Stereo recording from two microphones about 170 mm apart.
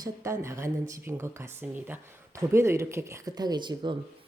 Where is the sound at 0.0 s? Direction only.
15° right (ahead or behind).